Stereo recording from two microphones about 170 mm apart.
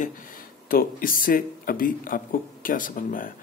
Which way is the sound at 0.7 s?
55° left (ahead or behind).